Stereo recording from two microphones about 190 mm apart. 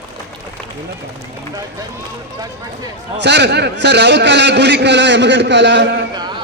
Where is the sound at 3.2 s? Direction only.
65° right (ahead or behind).